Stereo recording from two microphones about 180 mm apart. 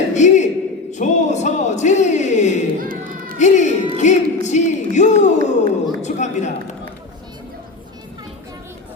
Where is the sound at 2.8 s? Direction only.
50° right (ahead or behind).